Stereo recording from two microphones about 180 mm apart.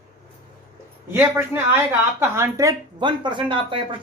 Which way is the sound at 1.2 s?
10° right (ahead or behind).